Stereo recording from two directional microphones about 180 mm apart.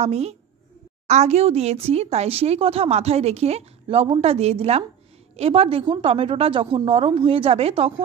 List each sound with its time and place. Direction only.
0.0 s speech: 35° right (ahead or behind)